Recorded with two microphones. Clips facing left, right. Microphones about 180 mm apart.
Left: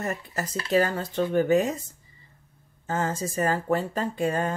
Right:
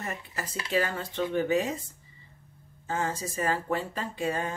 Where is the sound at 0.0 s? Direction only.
40° left (ahead or behind).